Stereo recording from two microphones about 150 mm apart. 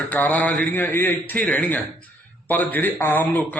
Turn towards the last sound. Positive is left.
turn(degrees=10)  # may be behind; listen again after turning